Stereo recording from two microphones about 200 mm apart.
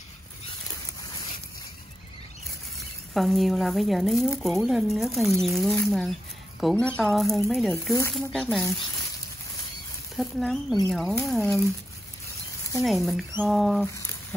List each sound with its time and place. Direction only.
3.2 s speech: centre (ahead or behind)
10.1 s speech: centre (ahead or behind)
12.8 s speech: centre (ahead or behind)